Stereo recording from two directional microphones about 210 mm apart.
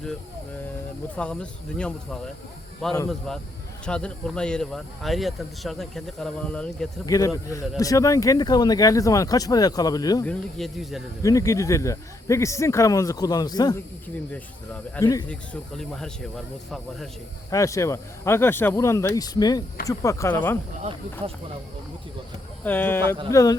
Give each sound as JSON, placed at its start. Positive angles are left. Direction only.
{"t": 1.1, "sound": "speech", "side_deg": 5}
{"t": 7.0, "sound": "speech", "side_deg": 15}
{"t": 10.2, "sound": "speech", "side_deg": 0}
{"t": 11.2, "sound": "speech", "side_deg": 15}
{"t": 14.3, "sound": "speech", "side_deg": 10}
{"t": 15.3, "sound": "speech", "side_deg": 5}
{"t": 17.5, "sound": "speech", "side_deg": 15}
{"t": 22.6, "sound": "speech", "side_deg": 10}